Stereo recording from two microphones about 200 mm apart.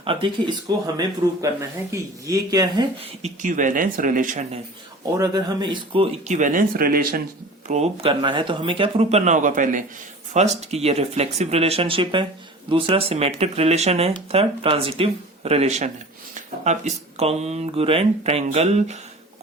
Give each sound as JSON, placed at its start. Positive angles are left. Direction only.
{"t": 0.0, "sound": "speech", "side_deg": -25}
{"t": 1.9, "sound": "speech", "side_deg": -15}
{"t": 3.2, "sound": "speech", "side_deg": -35}
{"t": 5.0, "sound": "speech", "side_deg": -20}
{"t": 7.7, "sound": "speech", "side_deg": -30}